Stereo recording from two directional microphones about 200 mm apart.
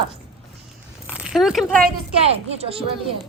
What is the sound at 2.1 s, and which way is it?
Speech, 30° right (ahead or behind).